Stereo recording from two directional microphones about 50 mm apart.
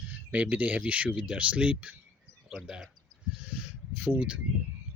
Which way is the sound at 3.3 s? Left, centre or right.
Right.